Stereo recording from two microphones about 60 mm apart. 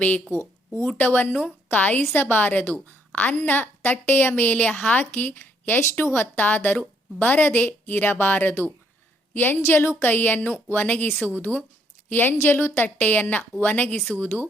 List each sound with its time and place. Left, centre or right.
0.9 s a woman's voice: left
9.6 s a woman's voice: left